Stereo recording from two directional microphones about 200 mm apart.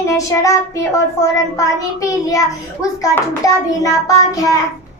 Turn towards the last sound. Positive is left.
turn(degrees=15)  # may be behind; listen again after turning